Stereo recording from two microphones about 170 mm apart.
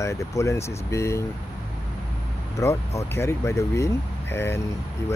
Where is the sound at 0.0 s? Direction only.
15° left (ahead or behind).